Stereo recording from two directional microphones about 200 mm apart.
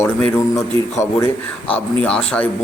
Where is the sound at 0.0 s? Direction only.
5° left (ahead or behind).